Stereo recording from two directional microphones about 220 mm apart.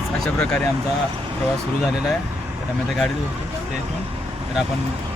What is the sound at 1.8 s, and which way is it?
Speech, centre (ahead or behind).